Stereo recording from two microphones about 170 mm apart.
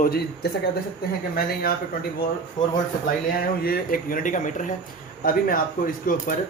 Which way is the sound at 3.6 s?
60° left (ahead or behind).